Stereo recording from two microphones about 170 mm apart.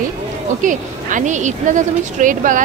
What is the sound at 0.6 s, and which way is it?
A woman's voice, 50° right (ahead or behind).